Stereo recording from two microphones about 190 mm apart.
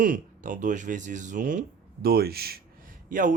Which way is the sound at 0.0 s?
45° right (ahead or behind).